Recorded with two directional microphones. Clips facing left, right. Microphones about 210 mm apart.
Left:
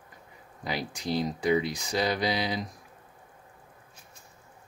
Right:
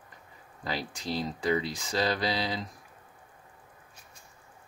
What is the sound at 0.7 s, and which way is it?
Speech, 15° left (ahead or behind).